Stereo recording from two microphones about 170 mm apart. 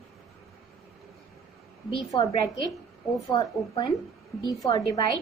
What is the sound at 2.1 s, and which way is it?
A woman's voice, 20° left (ahead or behind).